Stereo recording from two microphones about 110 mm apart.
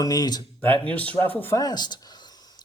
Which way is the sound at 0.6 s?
15° left (ahead or behind).